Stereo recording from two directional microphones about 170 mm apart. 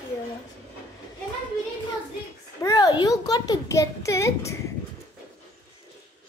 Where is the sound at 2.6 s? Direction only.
25° left (ahead or behind).